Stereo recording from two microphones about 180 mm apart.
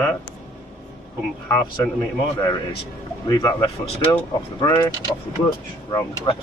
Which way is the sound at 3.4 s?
20° left (ahead or behind).